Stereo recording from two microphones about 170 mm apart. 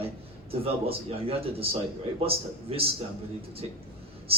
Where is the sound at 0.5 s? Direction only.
35° right (ahead or behind).